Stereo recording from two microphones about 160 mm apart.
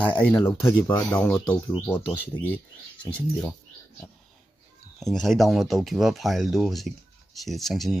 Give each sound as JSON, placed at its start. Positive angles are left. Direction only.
{"t": 0.0, "sound": "speech", "side_deg": 10}
{"t": 0.4, "sound": "speech", "side_deg": 20}
{"t": 1.1, "sound": "speech", "side_deg": 10}
{"t": 5.0, "sound": "speech", "side_deg": 0}